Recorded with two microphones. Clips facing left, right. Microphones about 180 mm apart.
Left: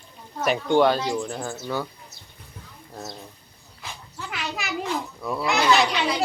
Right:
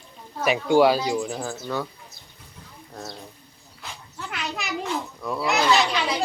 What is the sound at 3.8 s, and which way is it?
Dog, centre (ahead or behind).